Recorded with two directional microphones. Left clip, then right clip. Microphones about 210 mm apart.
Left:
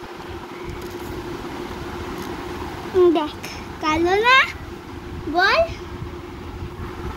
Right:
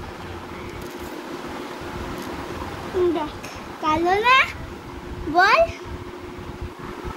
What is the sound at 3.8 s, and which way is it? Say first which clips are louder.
Speech: left 1 dB; centre (ahead or behind).